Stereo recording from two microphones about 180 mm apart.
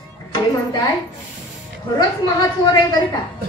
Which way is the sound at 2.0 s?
20° left (ahead or behind).